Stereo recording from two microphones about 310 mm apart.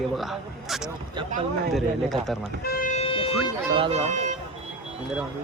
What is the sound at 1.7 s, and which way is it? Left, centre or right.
Speech, centre.